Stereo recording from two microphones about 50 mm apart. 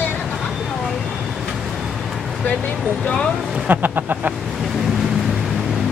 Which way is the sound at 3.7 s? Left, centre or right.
Right.